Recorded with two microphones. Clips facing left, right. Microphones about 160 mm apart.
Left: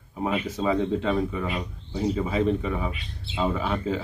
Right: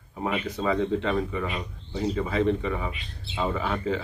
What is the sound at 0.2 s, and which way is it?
Speech, 10° left (ahead or behind).